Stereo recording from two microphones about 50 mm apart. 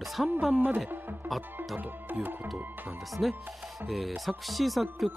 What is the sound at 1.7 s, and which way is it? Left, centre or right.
Music, right.